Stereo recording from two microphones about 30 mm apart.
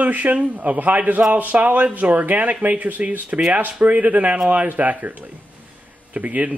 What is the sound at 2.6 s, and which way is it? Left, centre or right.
Speech, right.